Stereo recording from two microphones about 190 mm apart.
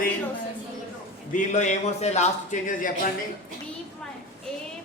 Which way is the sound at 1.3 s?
40° left (ahead or behind).